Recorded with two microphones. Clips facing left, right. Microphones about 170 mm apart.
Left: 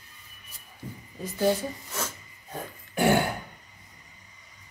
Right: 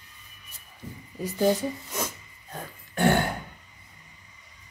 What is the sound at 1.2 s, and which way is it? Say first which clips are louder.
Speech: right 2 dB; 15° right (ahead or behind).